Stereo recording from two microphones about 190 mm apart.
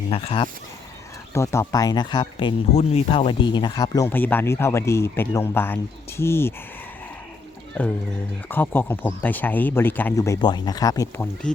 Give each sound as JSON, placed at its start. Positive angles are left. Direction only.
{"t": 0.1, "sound": "speech", "side_deg": 30}
{"t": 1.3, "sound": "speech", "side_deg": 15}
{"t": 8.4, "sound": "speech", "side_deg": 10}